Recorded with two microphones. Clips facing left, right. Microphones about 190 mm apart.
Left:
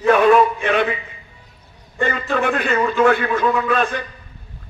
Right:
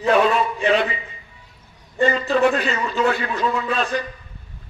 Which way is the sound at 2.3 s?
55° left (ahead or behind).